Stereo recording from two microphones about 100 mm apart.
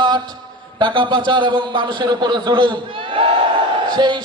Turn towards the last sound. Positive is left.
turn(degrees=-50)  # may be behind; listen again after turning